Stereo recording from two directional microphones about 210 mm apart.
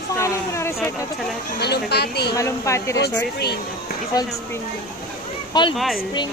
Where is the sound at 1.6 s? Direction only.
50° left (ahead or behind).